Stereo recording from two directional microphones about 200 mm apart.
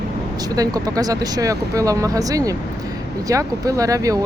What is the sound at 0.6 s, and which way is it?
Speech, 20° right (ahead or behind).